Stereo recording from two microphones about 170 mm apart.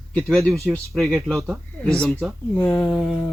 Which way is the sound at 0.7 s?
Centre (ahead or behind).